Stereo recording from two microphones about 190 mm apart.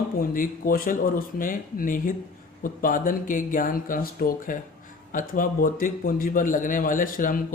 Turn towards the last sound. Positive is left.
turn(degrees=45)  # may be behind; listen again after turning